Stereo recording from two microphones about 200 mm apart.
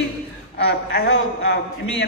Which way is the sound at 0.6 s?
55° left (ahead or behind).